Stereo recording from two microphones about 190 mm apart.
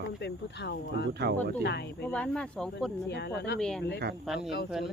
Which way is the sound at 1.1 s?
60° right (ahead or behind).